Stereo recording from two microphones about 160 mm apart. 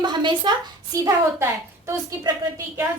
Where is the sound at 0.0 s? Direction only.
30° right (ahead or behind).